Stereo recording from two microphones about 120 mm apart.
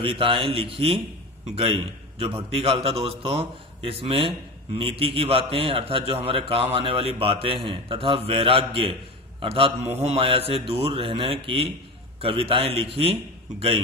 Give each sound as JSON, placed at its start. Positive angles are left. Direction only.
{"t": 0.0, "sound": "a man's voice", "side_deg": -50}